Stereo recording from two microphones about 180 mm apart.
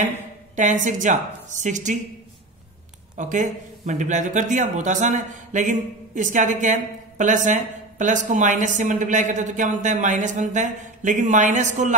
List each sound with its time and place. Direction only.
0.6 s speech: 45° right (ahead or behind)
3.2 s speech: 45° right (ahead or behind)